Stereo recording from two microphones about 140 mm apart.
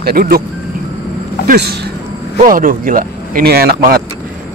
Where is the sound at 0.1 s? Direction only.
90° right.